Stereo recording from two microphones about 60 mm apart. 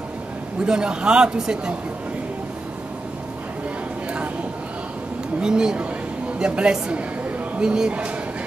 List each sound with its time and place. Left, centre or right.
0.7 s a man's voice: centre
5.4 s a man's voice: centre